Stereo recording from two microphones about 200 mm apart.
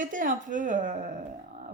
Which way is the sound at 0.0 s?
40° right (ahead or behind).